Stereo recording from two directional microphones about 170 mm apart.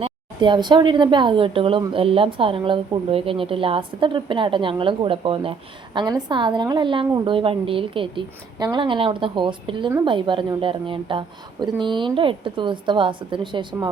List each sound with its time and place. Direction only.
0.0 s a woman's voice: 25° right (ahead or behind)